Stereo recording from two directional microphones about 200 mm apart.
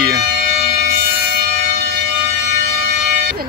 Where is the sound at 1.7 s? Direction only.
55° right (ahead or behind).